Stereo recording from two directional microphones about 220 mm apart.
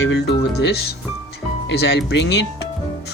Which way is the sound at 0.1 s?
50° left (ahead or behind).